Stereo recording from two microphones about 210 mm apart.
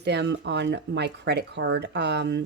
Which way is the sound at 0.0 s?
55° right (ahead or behind).